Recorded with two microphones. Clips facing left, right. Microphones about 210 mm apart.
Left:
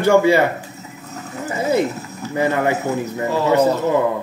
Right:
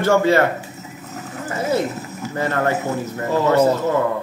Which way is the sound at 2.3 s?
15° left (ahead or behind).